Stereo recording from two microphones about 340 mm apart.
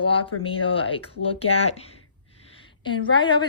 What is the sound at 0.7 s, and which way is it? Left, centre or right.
Speech, centre.